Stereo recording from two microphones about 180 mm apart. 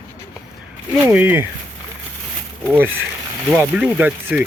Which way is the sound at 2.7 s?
10° right (ahead or behind).